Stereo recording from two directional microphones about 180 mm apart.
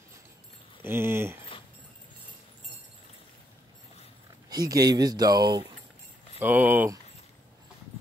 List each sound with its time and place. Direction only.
0.8 s speech: 15° right (ahead or behind)
4.5 s speech: 20° right (ahead or behind)
6.4 s speech: 10° right (ahead or behind)